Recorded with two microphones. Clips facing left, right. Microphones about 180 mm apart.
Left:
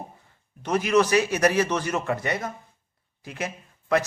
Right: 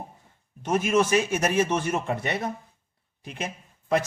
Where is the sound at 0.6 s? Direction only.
25° right (ahead or behind).